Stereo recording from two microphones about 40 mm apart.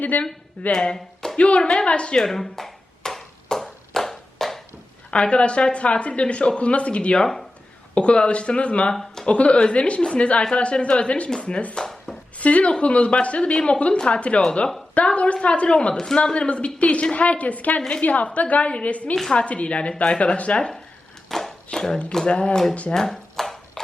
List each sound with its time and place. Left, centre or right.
0.0 s speech: left
0.7 s speech: left
0.9 s a sound: centre
1.4 s speech: left
2.1 s a sound: centre
5.1 s a woman's voice: left
8.9 s speech: centre
9.2 s speech: left
11.7 s speech: centre
12.4 s a woman's voice: left
21.2 s a sound: centre
21.7 s speech: centre
22.3 s a woman's voice: left
23.0 s dishes: centre